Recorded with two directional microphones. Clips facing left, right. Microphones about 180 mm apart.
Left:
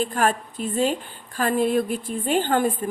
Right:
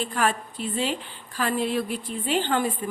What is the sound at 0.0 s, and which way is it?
A woman's voice, 45° left (ahead or behind).